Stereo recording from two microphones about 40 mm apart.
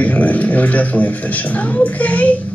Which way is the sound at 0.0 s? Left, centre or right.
Left.